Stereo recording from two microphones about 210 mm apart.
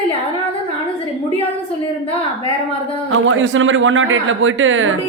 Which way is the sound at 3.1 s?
70° right (ahead or behind).